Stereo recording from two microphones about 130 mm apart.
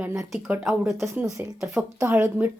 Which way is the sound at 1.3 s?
25° right (ahead or behind).